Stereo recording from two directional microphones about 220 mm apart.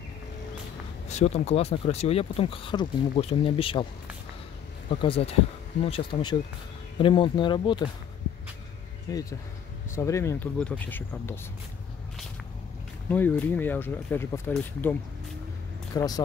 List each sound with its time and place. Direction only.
1.0 s speech: 30° left (ahead or behind)
4.8 s speech: 25° left (ahead or behind)
9.1 s speech: 15° left (ahead or behind)
13.1 s speech: 10° left (ahead or behind)